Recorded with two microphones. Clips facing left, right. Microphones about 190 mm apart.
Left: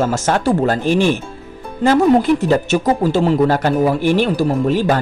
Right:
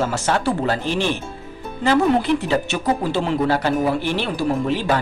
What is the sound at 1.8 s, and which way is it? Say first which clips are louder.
Speech: left 5 dB; 45° left (ahead or behind).